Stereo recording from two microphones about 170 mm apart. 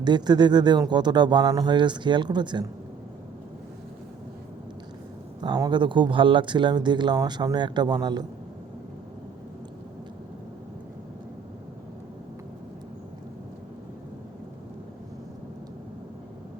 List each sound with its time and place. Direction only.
0.0 s speech: 25° right (ahead or behind)
5.4 s speech: 25° right (ahead or behind)